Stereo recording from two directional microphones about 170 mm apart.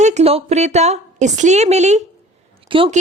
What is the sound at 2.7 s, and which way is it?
Speech, 30° right (ahead or behind).